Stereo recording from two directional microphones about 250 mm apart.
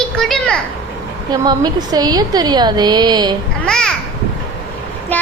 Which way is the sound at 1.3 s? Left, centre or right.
Centre.